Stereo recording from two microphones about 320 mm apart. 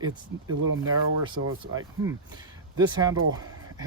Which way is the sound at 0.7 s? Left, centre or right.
Right.